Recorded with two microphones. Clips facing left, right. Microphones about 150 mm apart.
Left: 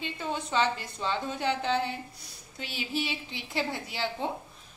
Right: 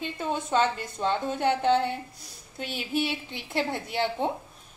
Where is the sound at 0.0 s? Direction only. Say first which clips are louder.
Right 3 dB; 50° right (ahead or behind).